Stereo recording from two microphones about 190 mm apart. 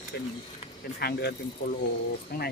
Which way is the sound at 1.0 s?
55° left (ahead or behind).